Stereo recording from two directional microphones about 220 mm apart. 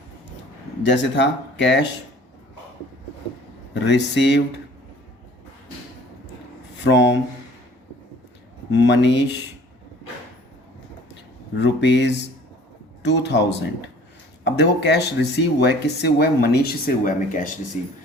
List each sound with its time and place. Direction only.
0.8 s speech: 55° left (ahead or behind)
3.8 s speech: 50° left (ahead or behind)
6.8 s speech: 55° left (ahead or behind)
8.7 s speech: 50° left (ahead or behind)
11.5 s speech: 55° left (ahead or behind); by 17.5 s 35° left (ahead or behind)